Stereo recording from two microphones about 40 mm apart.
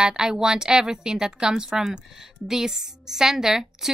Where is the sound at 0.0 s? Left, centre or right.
Centre.